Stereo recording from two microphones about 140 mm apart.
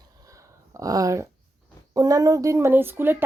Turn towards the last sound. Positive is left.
turn(degrees=-15)  # may be behind; listen again after turning